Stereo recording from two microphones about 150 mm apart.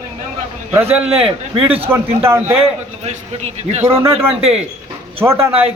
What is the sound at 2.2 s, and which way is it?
Speech, 15° right (ahead or behind).